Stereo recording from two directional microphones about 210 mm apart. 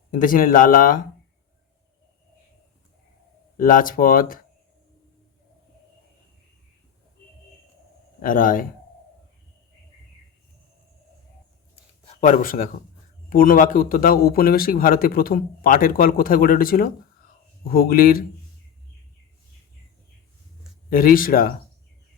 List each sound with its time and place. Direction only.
0.1 s speech: 40° left (ahead or behind)
3.6 s speech: 40° left (ahead or behind)
8.2 s speech: 40° left (ahead or behind)
12.0 s a man's voice: 40° left (ahead or behind)
20.9 s a man's voice: 40° left (ahead or behind)